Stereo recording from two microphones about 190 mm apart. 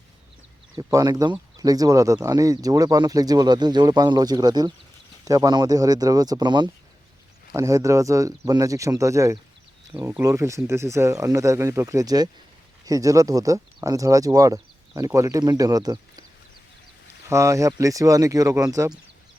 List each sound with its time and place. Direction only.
0.8 s speech: 20° right (ahead or behind)
17.2 s speech: 15° right (ahead or behind)